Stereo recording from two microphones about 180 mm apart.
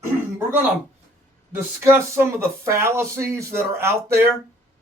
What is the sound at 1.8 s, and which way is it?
Speech, 15° right (ahead or behind).